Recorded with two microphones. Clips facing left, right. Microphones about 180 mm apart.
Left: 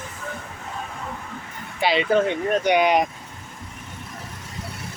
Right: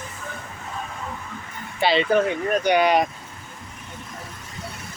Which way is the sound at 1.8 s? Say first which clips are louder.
Right 1 dB; 10° left (ahead or behind).